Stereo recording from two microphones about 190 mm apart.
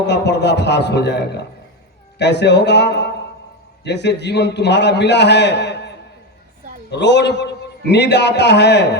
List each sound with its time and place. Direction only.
0.0 s a man's voice: 65° left (ahead or behind)